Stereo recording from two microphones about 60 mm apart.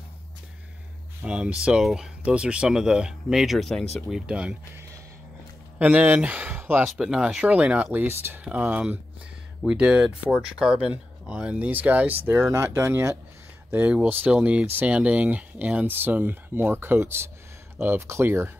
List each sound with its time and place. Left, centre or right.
1.2 s speech: centre
1.8 s speech: centre
2.2 s speech: centre
4.3 s speech: centre
5.8 s speech: right
7.0 s speech: centre; by 8.4 s right
8.5 s speech: right
9.7 s speech: centre; by 12.4 s right
12.4 s speech: right
13.7 s speech: right